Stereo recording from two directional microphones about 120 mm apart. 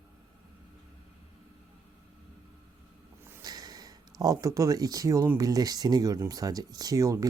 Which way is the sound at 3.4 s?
30° right (ahead or behind).